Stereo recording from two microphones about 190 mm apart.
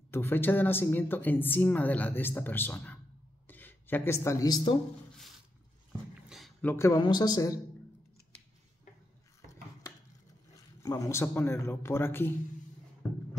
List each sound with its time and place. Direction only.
0.1 s a woman's voice: 10° left (ahead or behind)
6.2 s a sound: centre (ahead or behind)
6.6 s a woman's voice: 15° left (ahead or behind)
10.5 s a man's voice: 15° left (ahead or behind)